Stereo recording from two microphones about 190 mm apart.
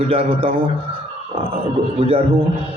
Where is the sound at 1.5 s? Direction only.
30° right (ahead or behind).